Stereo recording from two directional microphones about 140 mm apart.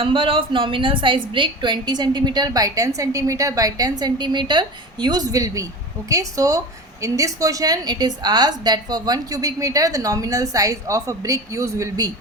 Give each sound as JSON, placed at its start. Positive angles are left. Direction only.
{"t": 0.0, "sound": "a woman's voice", "side_deg": -40}